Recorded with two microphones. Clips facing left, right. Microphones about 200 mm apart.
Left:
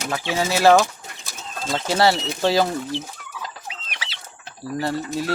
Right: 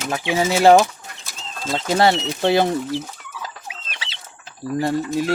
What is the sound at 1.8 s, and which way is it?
Speech, 20° right (ahead or behind).